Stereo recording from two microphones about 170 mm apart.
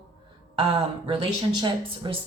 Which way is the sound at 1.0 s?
30° right (ahead or behind).